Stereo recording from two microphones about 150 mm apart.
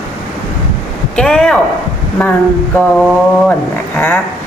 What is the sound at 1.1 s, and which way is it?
Speech, 5° left (ahead or behind).